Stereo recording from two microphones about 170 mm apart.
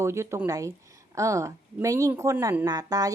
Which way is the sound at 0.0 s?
15° right (ahead or behind).